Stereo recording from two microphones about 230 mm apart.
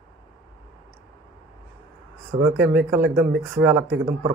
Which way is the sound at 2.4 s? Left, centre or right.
Centre.